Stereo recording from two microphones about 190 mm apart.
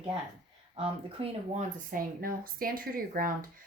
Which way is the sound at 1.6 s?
45° right (ahead or behind).